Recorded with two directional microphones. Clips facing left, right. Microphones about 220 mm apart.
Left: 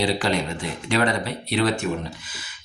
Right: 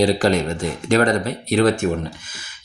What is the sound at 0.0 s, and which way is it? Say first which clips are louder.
Speech: right 6 dB; 45° right (ahead or behind).